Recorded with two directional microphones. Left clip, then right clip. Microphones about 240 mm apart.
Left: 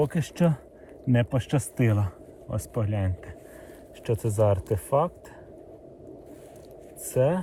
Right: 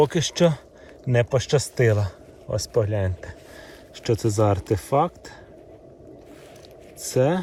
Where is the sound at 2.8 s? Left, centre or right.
Centre.